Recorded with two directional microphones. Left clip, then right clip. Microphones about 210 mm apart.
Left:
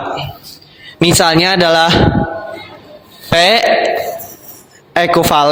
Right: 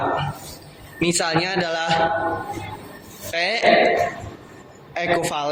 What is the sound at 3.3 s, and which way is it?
Speech, 50° left (ahead or behind).